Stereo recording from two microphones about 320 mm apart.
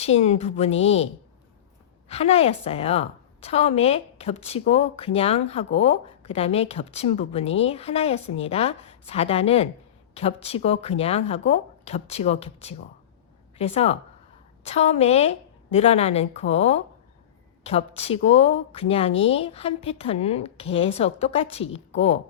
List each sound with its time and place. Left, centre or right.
0.0 s a woman's voice: centre